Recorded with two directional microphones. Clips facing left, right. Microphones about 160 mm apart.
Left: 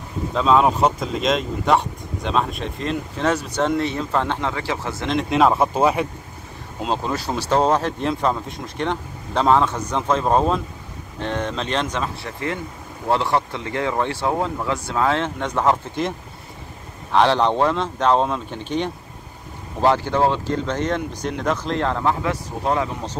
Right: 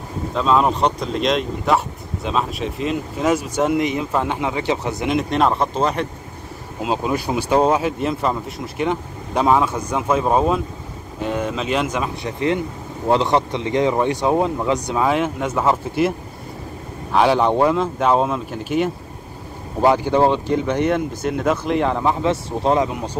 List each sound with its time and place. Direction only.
0.3 s speech: centre (ahead or behind); by 5.1 s 20° right (ahead or behind)
5.1 s speech: centre (ahead or behind)
6.8 s speech: 10° right (ahead or behind)